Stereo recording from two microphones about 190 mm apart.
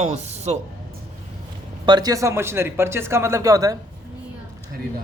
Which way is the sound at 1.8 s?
20° right (ahead or behind).